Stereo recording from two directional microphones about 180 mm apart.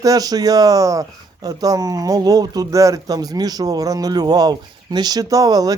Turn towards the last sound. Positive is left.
turn(degrees=-20)  # may be behind; listen again after turning